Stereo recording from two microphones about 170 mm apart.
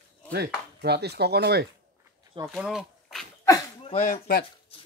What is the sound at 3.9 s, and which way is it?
Speech, 50° left (ahead or behind).